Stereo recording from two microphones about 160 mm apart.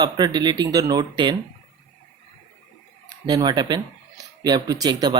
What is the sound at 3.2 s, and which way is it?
Speech, 25° right (ahead or behind).